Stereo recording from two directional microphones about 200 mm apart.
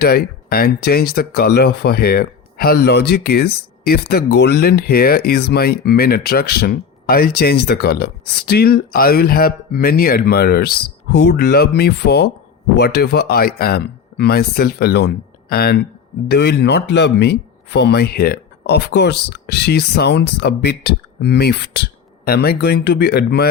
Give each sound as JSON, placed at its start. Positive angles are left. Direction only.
{"t": 0.0, "sound": "speech", "side_deg": 50}